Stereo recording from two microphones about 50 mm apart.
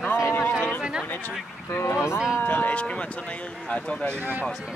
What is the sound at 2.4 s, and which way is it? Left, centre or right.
Speech, left.